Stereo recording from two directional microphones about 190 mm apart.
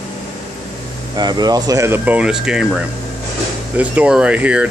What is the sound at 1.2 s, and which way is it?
Speech, 20° right (ahead or behind).